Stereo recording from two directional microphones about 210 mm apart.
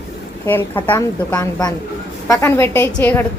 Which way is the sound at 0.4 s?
10° left (ahead or behind).